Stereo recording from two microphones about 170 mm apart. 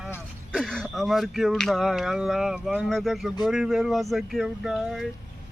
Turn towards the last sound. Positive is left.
turn(degrees=0)  # may be behind; listen again after turning